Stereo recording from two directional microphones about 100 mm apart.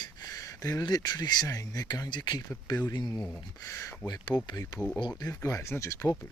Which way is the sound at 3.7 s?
30° left (ahead or behind).